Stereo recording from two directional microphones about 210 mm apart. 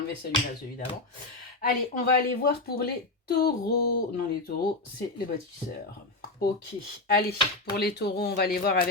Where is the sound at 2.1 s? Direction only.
45° left (ahead or behind).